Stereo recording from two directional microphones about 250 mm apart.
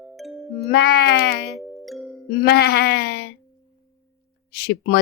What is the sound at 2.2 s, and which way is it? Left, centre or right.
Speech, left.